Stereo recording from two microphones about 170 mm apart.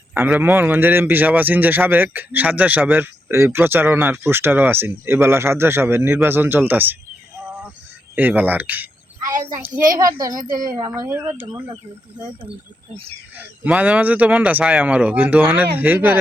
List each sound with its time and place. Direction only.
0.1 s a man's voice: 10° right (ahead or behind)
7.4 s a sound: 10° right (ahead or behind)
8.1 s a man's voice: 10° right (ahead or behind)
13.3 s a man's voice: 5° right (ahead or behind)